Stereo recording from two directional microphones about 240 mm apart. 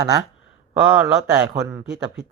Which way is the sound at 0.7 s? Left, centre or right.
Centre.